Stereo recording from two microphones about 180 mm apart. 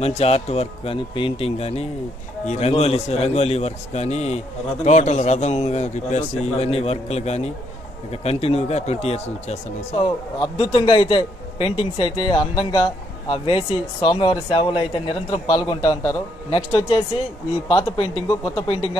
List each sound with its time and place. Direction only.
0.0 s a man's voice: 35° left (ahead or behind)
17.6 s speech: 20° left (ahead or behind)
18.5 s a man's voice: 30° left (ahead or behind)